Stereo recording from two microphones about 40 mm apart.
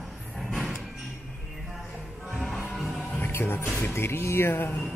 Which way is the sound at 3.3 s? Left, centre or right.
Left.